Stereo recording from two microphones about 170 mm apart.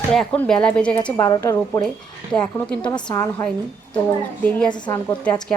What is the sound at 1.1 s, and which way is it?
Speech, 15° left (ahead or behind).